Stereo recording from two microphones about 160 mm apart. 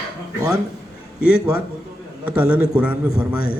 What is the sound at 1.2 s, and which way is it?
Speech, 70° left (ahead or behind).